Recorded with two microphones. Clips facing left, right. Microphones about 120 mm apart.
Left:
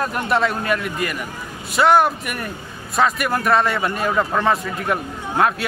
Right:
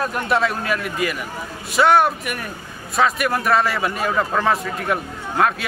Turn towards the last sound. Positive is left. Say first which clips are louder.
# left 1 dB
turn(degrees=0)  # may be behind; listen again after turning